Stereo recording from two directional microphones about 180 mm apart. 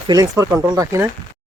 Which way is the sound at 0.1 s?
20° right (ahead or behind).